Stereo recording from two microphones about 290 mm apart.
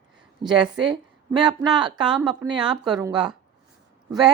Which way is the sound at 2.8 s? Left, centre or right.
Centre.